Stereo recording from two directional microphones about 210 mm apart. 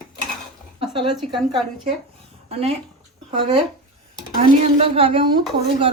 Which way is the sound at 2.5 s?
30° right (ahead or behind).